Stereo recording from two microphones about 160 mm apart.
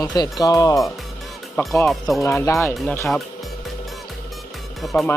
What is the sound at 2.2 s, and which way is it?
Speech, 15° left (ahead or behind).